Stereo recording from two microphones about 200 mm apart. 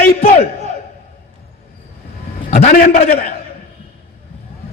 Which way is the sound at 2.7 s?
50° left (ahead or behind).